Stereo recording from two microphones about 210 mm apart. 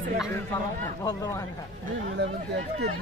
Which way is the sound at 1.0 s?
15° left (ahead or behind).